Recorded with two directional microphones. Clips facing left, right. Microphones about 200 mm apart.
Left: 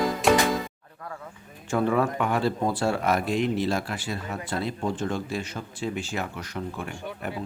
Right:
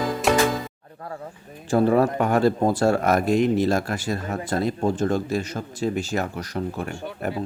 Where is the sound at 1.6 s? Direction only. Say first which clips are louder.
Right 5 dB; 35° right (ahead or behind).